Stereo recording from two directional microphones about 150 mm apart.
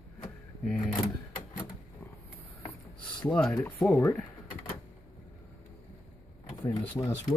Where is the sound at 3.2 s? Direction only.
10° left (ahead or behind).